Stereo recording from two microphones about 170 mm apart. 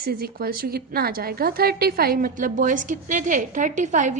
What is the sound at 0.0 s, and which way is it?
A woman's voice, 65° right (ahead or behind).